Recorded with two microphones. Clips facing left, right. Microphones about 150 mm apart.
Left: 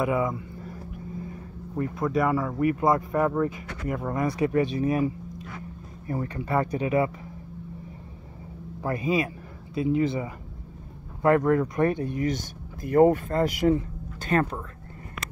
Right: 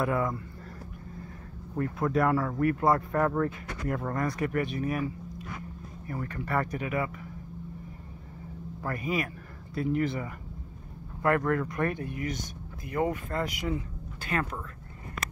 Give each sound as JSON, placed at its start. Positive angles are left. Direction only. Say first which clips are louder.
{"t": 0.0, "sound": "speech", "louder": "left 3 dB", "side_deg": 5}
{"t": 2.0, "sound": "speech", "louder": "left 1 dB", "side_deg": 5}
{"t": 4.5, "sound": "speech", "louder": "left 6 dB", "side_deg": 20}
{"t": 8.8, "sound": "speech", "louder": "left 6 dB", "side_deg": 20}
{"t": 12.8, "sound": "speech", "louder": "left 11 dB", "side_deg": 45}